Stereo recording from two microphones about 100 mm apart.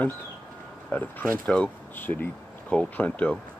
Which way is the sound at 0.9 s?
10° left (ahead or behind).